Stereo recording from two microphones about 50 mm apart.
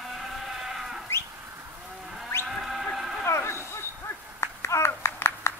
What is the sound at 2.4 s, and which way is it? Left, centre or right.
Sheep, centre.